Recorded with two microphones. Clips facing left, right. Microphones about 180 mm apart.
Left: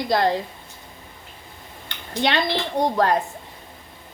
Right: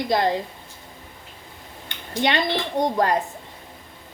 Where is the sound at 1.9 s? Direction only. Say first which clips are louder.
Even; 15° right (ahead or behind).